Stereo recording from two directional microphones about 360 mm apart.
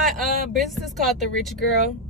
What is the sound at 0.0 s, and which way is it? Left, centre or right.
Speech, centre.